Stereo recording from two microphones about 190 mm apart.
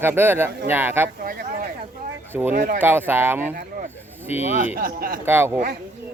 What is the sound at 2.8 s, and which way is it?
Speech, 10° right (ahead or behind).